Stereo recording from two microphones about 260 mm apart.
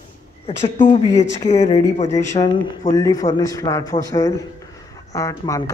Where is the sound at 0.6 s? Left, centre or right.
Left.